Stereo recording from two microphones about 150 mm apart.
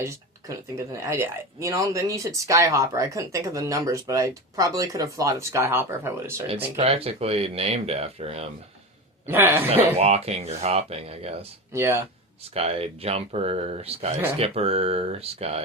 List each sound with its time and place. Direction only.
0.0 s a sound: 20° right (ahead or behind)
0.9 s speech: 20° right (ahead or behind)
6.7 s speech: 40° right (ahead or behind)
9.2 s a woman's voice: 15° right (ahead or behind)
10.0 s speech: 45° right (ahead or behind)
11.7 s a woman's voice: 20° right (ahead or behind)
12.4 s speech: 40° right (ahead or behind)